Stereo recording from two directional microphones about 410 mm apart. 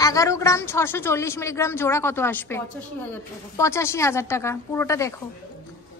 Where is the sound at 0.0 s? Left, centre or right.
Centre.